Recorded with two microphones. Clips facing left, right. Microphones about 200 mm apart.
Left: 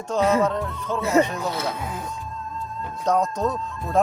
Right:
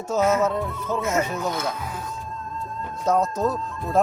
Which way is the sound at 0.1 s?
5° right (ahead or behind).